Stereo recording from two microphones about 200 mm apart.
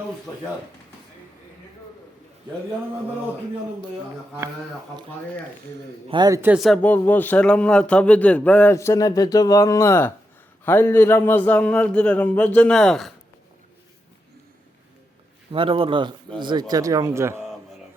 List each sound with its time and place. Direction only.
6.1 s speech: 20° right (ahead or behind); by 13.1 s centre (ahead or behind)
15.5 s speech: 25° right (ahead or behind)